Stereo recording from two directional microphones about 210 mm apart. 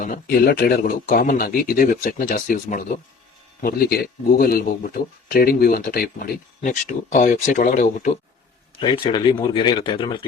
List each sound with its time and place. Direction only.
0.0 s a man's voice: 40° left (ahead or behind)
8.8 s speech: 25° left (ahead or behind)